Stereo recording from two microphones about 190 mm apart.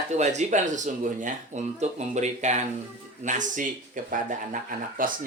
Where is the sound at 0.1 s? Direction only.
35° right (ahead or behind).